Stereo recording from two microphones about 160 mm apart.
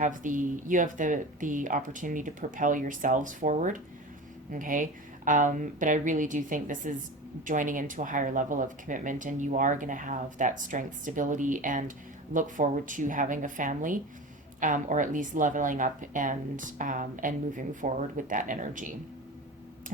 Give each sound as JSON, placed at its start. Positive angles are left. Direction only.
{"t": 0.0, "sound": "speech", "side_deg": -55}